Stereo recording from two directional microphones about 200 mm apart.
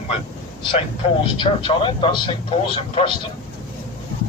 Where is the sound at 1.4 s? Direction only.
25° left (ahead or behind).